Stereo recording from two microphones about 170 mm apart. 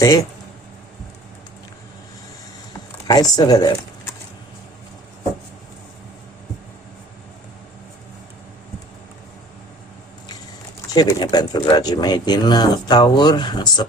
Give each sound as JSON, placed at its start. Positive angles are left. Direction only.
{"t": 0.0, "sound": "speech", "side_deg": 20}
{"t": 3.1, "sound": "speech", "side_deg": 25}
{"t": 10.9, "sound": "speech", "side_deg": 25}